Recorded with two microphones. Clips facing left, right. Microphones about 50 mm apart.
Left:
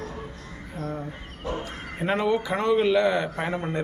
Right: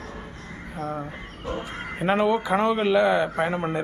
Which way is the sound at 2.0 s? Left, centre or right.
Centre.